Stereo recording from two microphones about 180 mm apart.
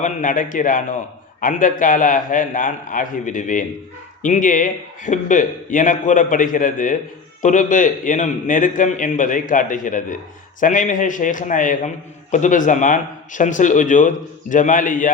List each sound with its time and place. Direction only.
0.0 s speech: 45° left (ahead or behind)